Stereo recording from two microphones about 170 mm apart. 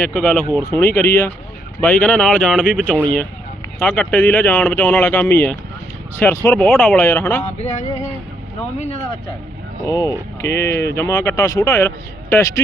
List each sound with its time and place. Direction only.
0.1 s speech: 10° left (ahead or behind)
7.4 s a sound: 40° left (ahead or behind)
9.8 s speech: 20° left (ahead or behind)